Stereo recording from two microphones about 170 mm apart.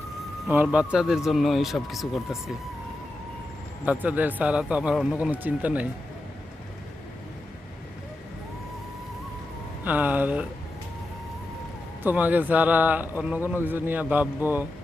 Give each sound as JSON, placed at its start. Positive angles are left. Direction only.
{"t": 0.5, "sound": "a man's voice", "side_deg": -10}
{"t": 3.8, "sound": "speech", "side_deg": -10}
{"t": 9.8, "sound": "speech", "side_deg": -10}
{"t": 12.0, "sound": "speech", "side_deg": -10}